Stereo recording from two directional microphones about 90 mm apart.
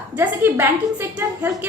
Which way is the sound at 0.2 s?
25° right (ahead or behind).